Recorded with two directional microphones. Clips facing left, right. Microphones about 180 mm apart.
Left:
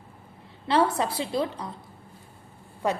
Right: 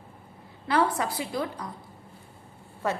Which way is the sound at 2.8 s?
15° left (ahead or behind).